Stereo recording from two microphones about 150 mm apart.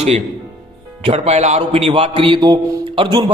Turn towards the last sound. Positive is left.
turn(degrees=-30)  # may be behind; listen again after turning